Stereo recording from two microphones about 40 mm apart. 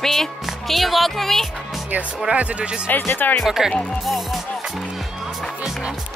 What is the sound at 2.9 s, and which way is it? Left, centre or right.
Speech, left.